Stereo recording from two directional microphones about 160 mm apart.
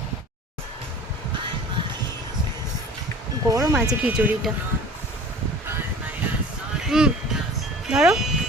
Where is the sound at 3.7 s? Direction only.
5° right (ahead or behind).